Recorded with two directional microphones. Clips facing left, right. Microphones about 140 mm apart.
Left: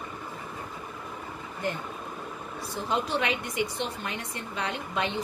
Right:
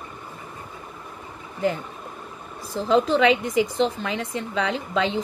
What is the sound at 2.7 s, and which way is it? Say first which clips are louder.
A woman's voice: right 9 dB; 90° right.